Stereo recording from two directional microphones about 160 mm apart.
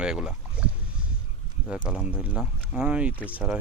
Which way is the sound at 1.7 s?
5° right (ahead or behind).